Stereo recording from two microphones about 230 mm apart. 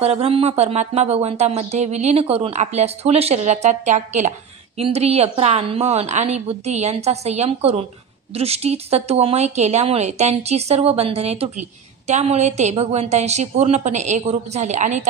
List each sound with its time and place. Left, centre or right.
0.0 s a woman's voice: right